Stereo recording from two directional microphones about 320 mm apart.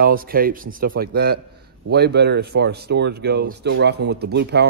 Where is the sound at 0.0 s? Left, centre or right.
Right.